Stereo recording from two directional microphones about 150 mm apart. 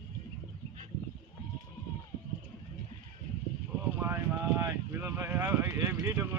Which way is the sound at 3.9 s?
15° right (ahead or behind).